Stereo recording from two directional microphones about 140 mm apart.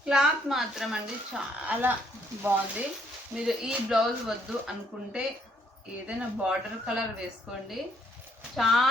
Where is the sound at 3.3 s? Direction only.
5° right (ahead or behind).